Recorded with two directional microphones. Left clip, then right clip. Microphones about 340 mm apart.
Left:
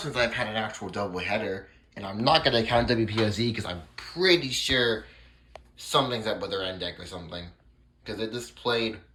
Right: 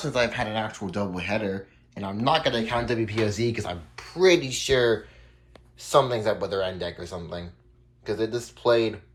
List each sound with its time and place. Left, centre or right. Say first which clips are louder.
0.0 s speech: right 2 dB; centre